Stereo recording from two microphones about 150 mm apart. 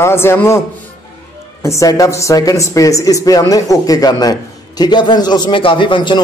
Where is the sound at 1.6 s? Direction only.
20° left (ahead or behind).